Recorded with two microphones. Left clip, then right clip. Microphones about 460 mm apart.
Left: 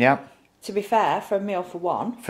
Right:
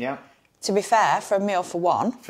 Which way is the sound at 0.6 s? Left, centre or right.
Right.